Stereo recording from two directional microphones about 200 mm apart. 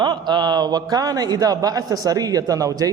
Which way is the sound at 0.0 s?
20° right (ahead or behind).